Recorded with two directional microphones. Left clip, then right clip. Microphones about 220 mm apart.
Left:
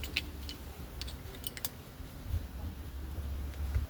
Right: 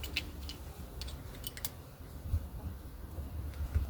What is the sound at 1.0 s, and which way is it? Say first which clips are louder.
Typing: left 2 dB; 5° left (ahead or behind).